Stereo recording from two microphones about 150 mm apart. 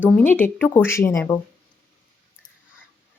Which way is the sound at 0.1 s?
10° left (ahead or behind).